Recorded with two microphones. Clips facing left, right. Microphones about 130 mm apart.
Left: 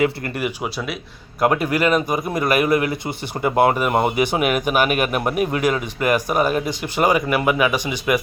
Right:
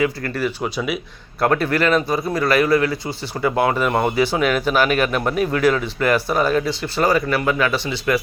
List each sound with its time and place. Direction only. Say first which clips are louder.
0.6 s speech: right 3 dB; centre (ahead or behind)
1.4 s speech: even; 15° left (ahead or behind)
3.4 s speech: left 2 dB; 30° left (ahead or behind)
3.8 s speech: even; 15° left (ahead or behind)